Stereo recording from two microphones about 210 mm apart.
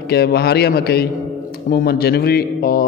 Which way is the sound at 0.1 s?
50° left (ahead or behind).